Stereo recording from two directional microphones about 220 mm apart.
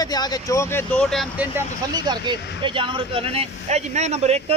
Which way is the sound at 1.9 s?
20° right (ahead or behind).